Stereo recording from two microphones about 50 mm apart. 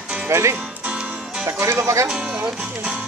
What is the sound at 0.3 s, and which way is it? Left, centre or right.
Speech, right.